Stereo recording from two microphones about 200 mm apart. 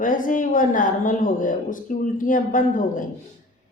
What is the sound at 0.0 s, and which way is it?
Speech, 40° left (ahead or behind).